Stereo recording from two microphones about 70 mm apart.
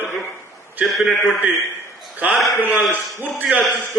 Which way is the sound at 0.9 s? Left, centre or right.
Centre.